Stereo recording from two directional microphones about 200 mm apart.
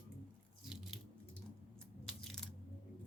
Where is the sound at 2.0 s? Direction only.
Centre (ahead or behind).